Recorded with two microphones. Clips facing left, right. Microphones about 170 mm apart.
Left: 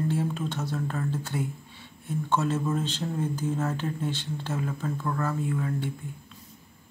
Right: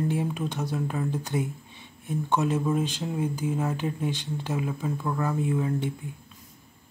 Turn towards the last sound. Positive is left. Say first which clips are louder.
# right 3 dB
turn(degrees=-20)  # may be behind; listen again after turning